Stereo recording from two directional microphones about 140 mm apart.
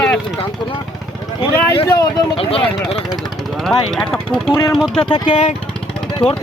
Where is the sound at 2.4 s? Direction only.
45° left (ahead or behind).